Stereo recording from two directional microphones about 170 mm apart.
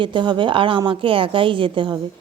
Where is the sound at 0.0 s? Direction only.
30° right (ahead or behind).